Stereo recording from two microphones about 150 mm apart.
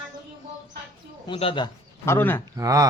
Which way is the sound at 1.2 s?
35° left (ahead or behind).